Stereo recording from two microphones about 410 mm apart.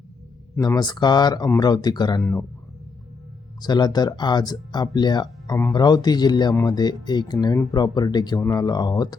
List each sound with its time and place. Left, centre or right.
0.5 s speech: centre
3.6 s speech: centre